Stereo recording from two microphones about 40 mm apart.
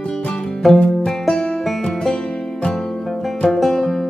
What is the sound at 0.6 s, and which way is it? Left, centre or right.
Music, centre.